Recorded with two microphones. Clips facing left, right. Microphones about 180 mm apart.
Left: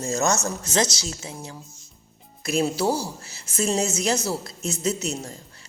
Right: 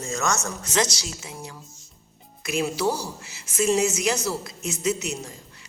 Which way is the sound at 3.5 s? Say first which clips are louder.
Right 2 dB; 30° left (ahead or behind).